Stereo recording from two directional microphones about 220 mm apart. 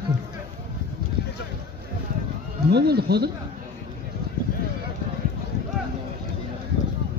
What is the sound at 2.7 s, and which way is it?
Speech, 45° right (ahead or behind).